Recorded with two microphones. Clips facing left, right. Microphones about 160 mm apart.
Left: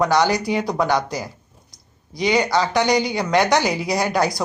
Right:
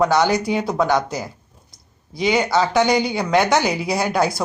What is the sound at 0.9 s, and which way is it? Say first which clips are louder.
Speech: right 1 dB; 20° right (ahead or behind).